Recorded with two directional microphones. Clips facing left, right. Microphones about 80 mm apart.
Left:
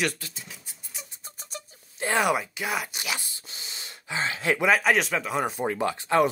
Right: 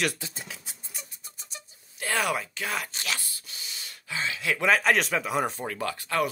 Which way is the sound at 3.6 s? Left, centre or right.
Left.